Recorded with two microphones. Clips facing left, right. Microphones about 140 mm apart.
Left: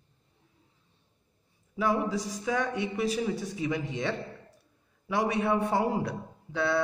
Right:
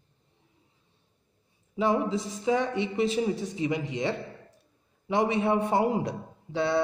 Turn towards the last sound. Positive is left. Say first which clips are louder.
# right 2 dB
turn(degrees=-20)  # may be behind; listen again after turning